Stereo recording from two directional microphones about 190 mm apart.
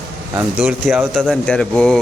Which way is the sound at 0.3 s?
5° right (ahead or behind).